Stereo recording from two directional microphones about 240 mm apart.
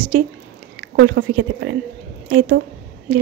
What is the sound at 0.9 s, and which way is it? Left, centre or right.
A woman's voice, right.